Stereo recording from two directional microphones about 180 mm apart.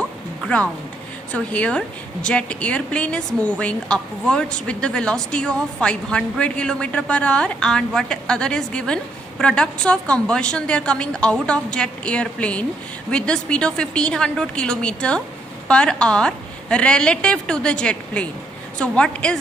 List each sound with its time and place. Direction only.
1.3 s a woman's voice: 5° left (ahead or behind)